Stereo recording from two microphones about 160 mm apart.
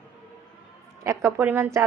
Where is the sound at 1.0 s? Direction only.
15° right (ahead or behind).